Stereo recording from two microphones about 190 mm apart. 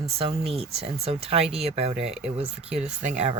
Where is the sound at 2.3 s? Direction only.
30° right (ahead or behind).